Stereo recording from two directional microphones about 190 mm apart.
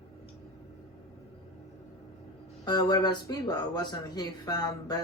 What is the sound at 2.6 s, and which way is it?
A man's voice, 20° left (ahead or behind).